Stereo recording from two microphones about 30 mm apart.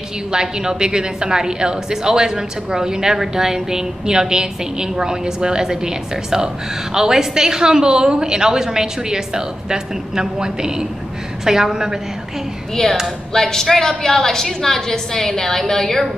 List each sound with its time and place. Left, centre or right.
0.3 s a woman's voice: right
12.8 s a woman's voice: left